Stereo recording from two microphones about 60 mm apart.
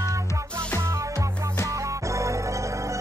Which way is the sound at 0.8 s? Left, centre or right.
Right.